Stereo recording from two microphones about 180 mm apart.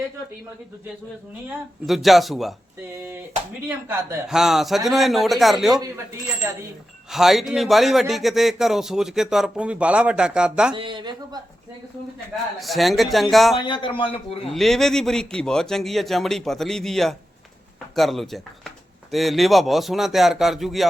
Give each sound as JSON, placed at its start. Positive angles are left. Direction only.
{"t": 1.9, "sound": "speech", "side_deg": 0}
{"t": 2.9, "sound": "speech", "side_deg": -15}
{"t": 7.1, "sound": "speech", "side_deg": 0}
{"t": 10.8, "sound": "a woman's voice", "side_deg": -25}
{"t": 12.5, "sound": "speech", "side_deg": 0}
{"t": 13.6, "sound": "a man's voice", "side_deg": 25}
{"t": 14.5, "sound": "speech", "side_deg": 0}